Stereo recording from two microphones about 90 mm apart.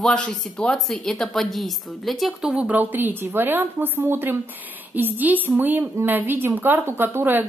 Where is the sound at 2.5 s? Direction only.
15° right (ahead or behind).